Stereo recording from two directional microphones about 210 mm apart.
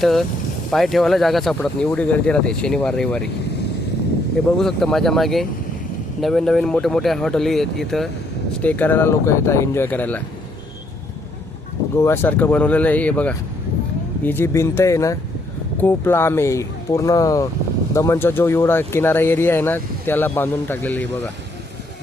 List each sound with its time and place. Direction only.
0.0 s speech: centre (ahead or behind)
4.5 s speech: centre (ahead or behind)
11.9 s speech: 10° left (ahead or behind)